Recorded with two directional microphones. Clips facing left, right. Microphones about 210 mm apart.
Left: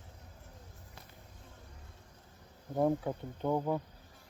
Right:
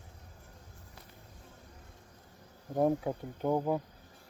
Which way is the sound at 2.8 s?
15° right (ahead or behind).